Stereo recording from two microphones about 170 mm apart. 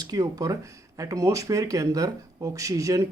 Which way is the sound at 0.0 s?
20° right (ahead or behind).